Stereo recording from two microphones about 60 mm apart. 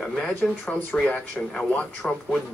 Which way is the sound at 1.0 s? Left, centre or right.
Centre.